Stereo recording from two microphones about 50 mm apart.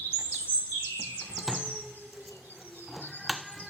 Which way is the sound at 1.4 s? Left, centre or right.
Centre.